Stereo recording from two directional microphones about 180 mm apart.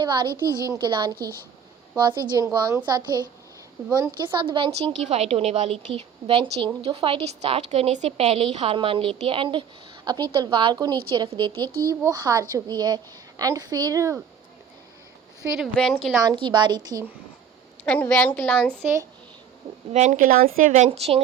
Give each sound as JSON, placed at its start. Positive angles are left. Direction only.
{"t": 0.0, "sound": "a woman's voice", "side_deg": -25}
{"t": 4.8, "sound": "a woman's voice", "side_deg": -35}
{"t": 15.5, "sound": "a woman's voice", "side_deg": 0}
{"t": 16.2, "sound": "a woman's voice", "side_deg": -25}
{"t": 17.8, "sound": "a woman's voice", "side_deg": 10}
{"t": 19.9, "sound": "a woman's voice", "side_deg": -40}